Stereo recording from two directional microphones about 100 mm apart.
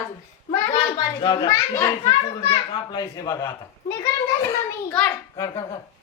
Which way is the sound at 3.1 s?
35° left (ahead or behind).